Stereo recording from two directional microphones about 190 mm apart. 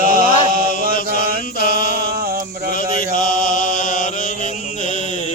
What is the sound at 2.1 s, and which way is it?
Male singing, 55° right (ahead or behind).